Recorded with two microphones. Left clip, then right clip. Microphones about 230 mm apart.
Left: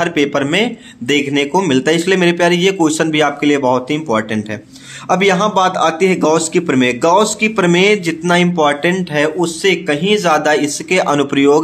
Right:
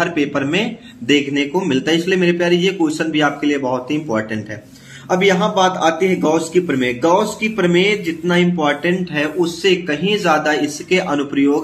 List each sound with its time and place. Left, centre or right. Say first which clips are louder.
0.0 s speech: left 3 dB; left